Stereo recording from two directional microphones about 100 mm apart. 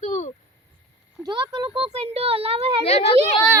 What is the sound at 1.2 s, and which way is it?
Speech, 50° right (ahead or behind).